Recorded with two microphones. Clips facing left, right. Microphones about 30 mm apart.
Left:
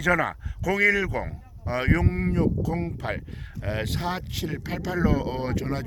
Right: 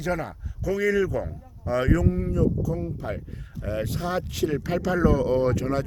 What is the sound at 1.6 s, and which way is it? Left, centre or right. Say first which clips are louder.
Speech: right 2 dB; left.